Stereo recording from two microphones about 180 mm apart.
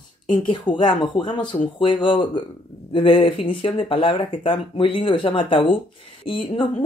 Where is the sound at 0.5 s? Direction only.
25° left (ahead or behind).